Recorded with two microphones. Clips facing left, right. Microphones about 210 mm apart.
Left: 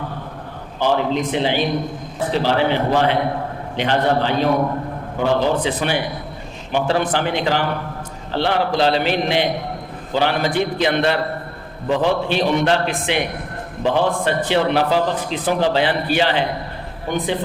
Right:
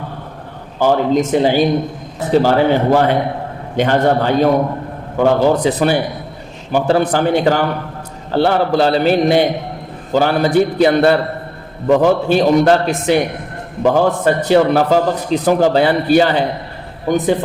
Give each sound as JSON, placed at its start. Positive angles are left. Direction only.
{"t": 0.8, "sound": "a man's voice", "side_deg": -45}